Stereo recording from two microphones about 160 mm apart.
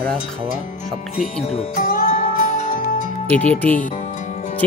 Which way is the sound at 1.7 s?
60° left (ahead or behind).